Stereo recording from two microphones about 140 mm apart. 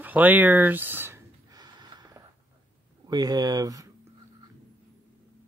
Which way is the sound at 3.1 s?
30° right (ahead or behind).